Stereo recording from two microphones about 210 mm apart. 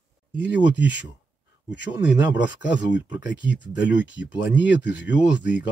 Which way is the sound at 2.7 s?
55° left (ahead or behind).